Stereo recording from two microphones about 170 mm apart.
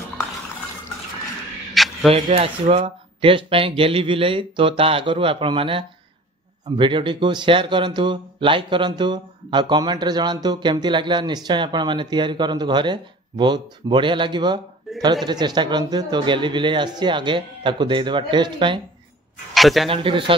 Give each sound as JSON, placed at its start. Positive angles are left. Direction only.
{"t": 1.7, "sound": "a sound", "side_deg": 0}
{"t": 2.0, "sound": "speech", "side_deg": -35}
{"t": 14.9, "sound": "a man's voice", "side_deg": 0}
{"t": 15.2, "sound": "speech", "side_deg": -25}
{"t": 19.5, "sound": "a man's voice", "side_deg": 0}
{"t": 19.9, "sound": "speech", "side_deg": -30}